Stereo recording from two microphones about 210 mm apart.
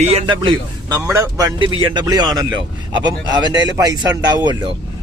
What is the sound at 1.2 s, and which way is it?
Speech, 15° right (ahead or behind).